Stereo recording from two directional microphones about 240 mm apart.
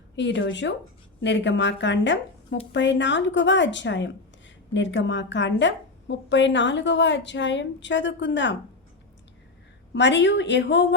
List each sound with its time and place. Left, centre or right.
0.2 s a woman's voice: left
9.9 s a woman's voice: left